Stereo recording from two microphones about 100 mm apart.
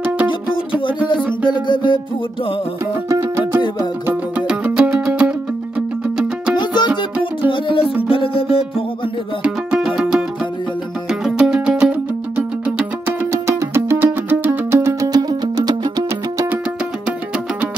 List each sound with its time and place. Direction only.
0.7 s music: 55° left (ahead or behind)
3.1 s music: 30° right (ahead or behind)
4.1 s music: 15° right (ahead or behind)
6.5 s music: 50° left (ahead or behind); by 8.8 s 65° left (ahead or behind)
9.4 s music: 10° right (ahead or behind); by 15.0 s 25° right (ahead or behind)
15.2 s music: 45° right (ahead or behind)